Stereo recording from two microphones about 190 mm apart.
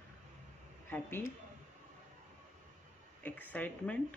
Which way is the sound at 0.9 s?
10° left (ahead or behind).